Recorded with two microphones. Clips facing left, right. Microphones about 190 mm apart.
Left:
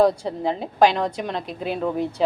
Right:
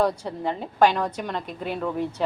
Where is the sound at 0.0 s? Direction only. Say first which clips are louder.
Left 5 dB; 30° left (ahead or behind).